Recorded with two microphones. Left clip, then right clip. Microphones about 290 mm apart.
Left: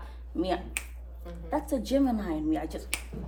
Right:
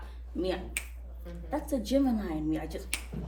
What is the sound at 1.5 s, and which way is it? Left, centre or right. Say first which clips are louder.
A woman's voice: left 2 dB; left.